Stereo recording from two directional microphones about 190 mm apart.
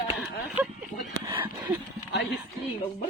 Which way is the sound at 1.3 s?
25° right (ahead or behind).